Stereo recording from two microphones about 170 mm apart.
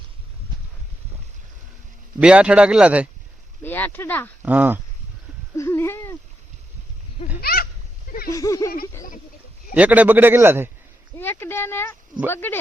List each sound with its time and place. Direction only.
2.2 s a man's voice: 5° right (ahead or behind)
3.6 s speech: 10° left (ahead or behind)
4.4 s a man's voice: 10° right (ahead or behind)
5.5 s speech: 15° left (ahead or behind)
7.4 s speech: 60° left (ahead or behind)
8.3 s a sound: 20° left (ahead or behind)
9.7 s a man's voice: 10° right (ahead or behind)
11.2 s speech: 10° left (ahead or behind)